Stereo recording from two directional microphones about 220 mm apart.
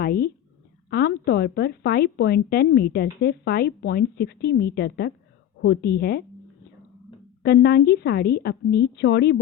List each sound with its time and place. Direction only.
0.0 s speech: 45° left (ahead or behind)
7.4 s speech: 45° left (ahead or behind)